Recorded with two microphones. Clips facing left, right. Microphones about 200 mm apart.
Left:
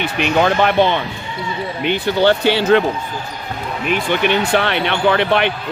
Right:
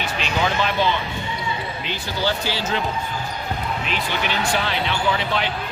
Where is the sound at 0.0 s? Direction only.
60° left (ahead or behind).